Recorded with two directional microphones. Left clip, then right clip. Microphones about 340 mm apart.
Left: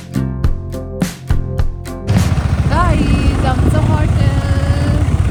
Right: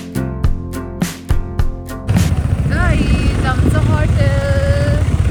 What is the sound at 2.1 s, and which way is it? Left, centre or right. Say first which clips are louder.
Vehicle: left 1 dB; centre.